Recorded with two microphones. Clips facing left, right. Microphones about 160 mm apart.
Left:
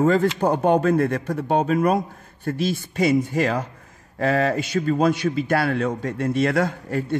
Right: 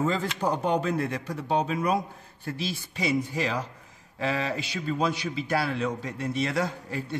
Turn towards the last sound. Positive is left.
turn(degrees=55)  # may be behind; listen again after turning